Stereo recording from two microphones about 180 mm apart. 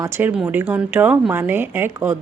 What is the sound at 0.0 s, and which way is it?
A woman's voice, 10° right (ahead or behind).